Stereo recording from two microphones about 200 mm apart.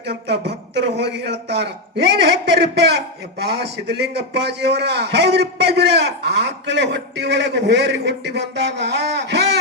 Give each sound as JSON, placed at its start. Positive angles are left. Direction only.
{"t": 0.0, "sound": "a man's voice", "side_deg": -55}